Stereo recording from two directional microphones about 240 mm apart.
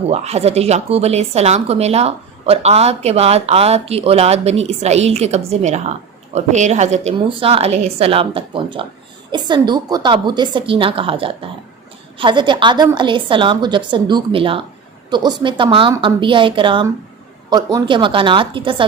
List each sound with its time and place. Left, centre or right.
0.1 s speech: right